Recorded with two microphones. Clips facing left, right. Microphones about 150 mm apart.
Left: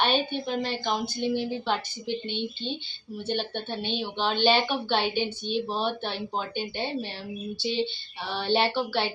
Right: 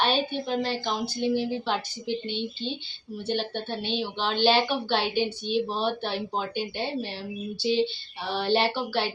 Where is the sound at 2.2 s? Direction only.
40° right (ahead or behind).